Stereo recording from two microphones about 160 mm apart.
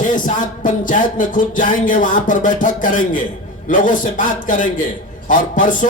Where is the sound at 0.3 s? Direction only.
55° left (ahead or behind).